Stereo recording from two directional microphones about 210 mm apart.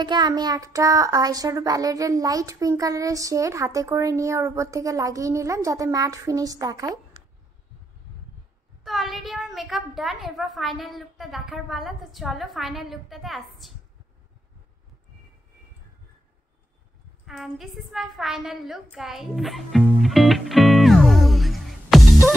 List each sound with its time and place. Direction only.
0.0 s child singing: 20° right (ahead or behind)
8.8 s a woman's voice: centre (ahead or behind)
17.3 s a sound: centre (ahead or behind)